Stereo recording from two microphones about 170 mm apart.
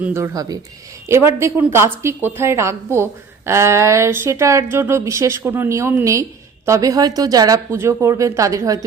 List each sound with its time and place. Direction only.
0.0 s a woman's voice: 15° right (ahead or behind)